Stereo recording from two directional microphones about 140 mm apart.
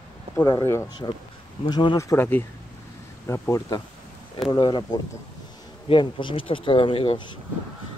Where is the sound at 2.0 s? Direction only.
20° left (ahead or behind).